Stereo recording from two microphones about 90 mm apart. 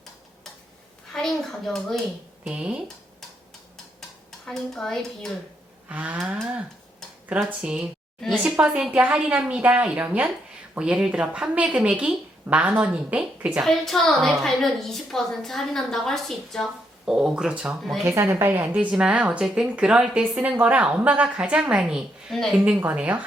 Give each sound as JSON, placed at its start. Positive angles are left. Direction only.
{"t": 1.1, "sound": "speech", "side_deg": 5}
{"t": 2.4, "sound": "speech", "side_deg": -10}
{"t": 4.3, "sound": "speech", "side_deg": 5}
{"t": 5.9, "sound": "speech", "side_deg": -20}
{"t": 7.6, "sound": "speech", "side_deg": -10}
{"t": 13.6, "sound": "a woman's voice", "side_deg": 5}
{"t": 18.0, "sound": "speech", "side_deg": -35}
{"t": 22.9, "sound": "speech", "side_deg": -15}